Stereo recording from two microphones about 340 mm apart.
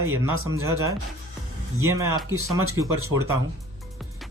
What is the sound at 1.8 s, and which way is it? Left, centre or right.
Speech, centre.